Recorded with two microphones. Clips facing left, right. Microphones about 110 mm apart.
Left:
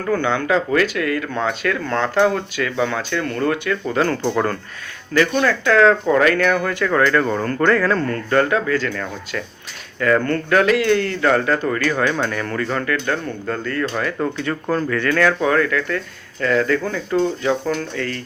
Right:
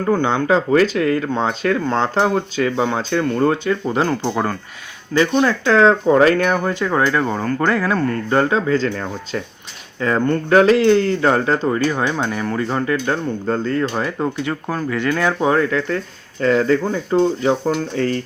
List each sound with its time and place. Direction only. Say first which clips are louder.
0.0 s speech: right 2 dB; 25° right (ahead or behind); by 8.1 s 10° right (ahead or behind)
8.3 s speech: even; 25° right (ahead or behind)
10.5 s speech: right 4 dB; 30° right (ahead or behind)
14.4 s speech: left 2 dB; 10° right (ahead or behind); by 18.2 s 30° right (ahead or behind)